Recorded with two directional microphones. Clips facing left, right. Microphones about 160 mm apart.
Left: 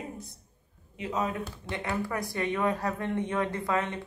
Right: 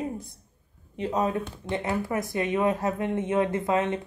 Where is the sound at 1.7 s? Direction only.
20° right (ahead or behind).